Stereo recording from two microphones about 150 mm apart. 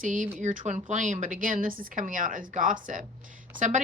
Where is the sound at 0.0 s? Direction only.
60° right (ahead or behind).